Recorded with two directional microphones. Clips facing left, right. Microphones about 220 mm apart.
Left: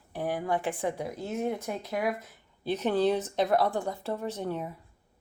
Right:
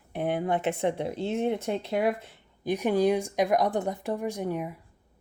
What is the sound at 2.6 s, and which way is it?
Speech, 15° right (ahead or behind).